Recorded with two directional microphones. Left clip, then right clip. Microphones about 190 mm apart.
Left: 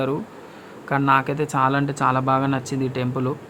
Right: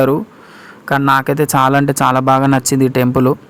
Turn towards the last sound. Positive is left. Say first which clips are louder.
# right 12 dB
turn(degrees=-40)  # may be behind; listen again after turning